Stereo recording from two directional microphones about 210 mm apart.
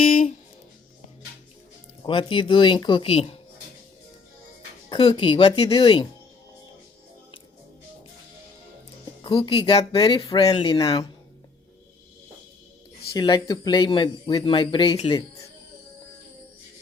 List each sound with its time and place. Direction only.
0.0 s music: 40° left (ahead or behind)
2.0 s speech: 25° left (ahead or behind)
4.9 s speech: 25° left (ahead or behind)
9.2 s speech: 25° left (ahead or behind)
13.1 s speech: 20° left (ahead or behind)